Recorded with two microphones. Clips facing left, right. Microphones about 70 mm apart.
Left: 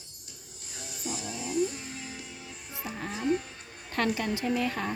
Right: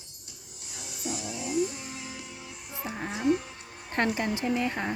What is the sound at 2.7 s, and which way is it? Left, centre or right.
Music, right.